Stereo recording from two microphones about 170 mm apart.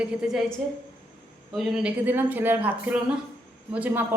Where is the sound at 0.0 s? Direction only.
5° right (ahead or behind).